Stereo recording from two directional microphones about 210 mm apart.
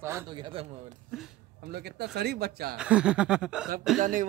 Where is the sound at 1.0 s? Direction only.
Centre (ahead or behind).